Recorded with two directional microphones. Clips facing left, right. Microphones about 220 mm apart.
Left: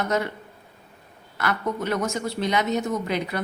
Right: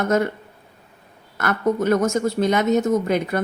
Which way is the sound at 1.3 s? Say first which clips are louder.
Right 6 dB; 45° right (ahead or behind).